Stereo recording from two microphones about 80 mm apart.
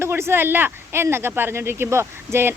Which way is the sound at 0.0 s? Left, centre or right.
Right.